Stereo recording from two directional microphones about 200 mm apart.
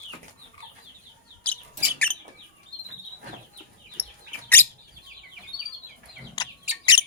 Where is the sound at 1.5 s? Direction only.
5° left (ahead or behind).